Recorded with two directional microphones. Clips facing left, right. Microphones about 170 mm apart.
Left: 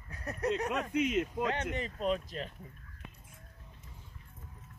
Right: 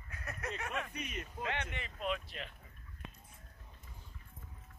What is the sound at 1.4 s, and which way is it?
Speech, 40° left (ahead or behind).